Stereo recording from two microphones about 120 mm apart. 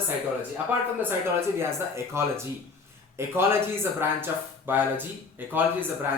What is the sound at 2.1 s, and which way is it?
Speech, 20° right (ahead or behind).